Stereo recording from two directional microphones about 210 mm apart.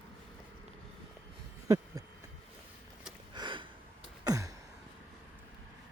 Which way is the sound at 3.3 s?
20° right (ahead or behind).